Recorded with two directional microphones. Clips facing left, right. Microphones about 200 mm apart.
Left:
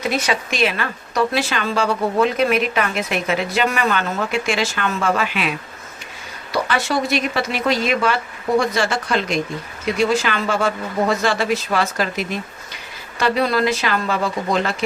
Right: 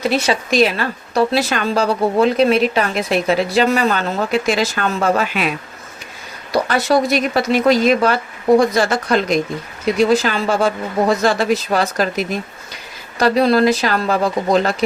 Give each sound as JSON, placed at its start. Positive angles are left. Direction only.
{"t": 0.1, "sound": "a woman's voice", "side_deg": -35}
{"t": 6.7, "sound": "a woman's voice", "side_deg": -40}